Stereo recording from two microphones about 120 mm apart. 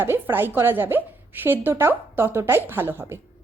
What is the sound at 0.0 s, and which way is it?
A woman's voice, 20° right (ahead or behind).